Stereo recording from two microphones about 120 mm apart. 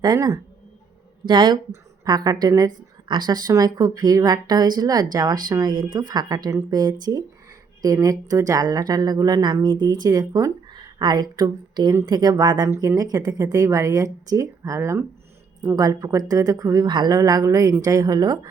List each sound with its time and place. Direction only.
0.0 s a woman's voice: 35° right (ahead or behind)